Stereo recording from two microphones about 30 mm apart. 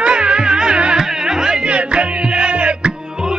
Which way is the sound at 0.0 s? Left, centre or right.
Right.